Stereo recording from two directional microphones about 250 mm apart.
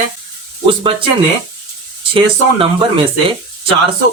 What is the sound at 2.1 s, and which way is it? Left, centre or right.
Speech, right.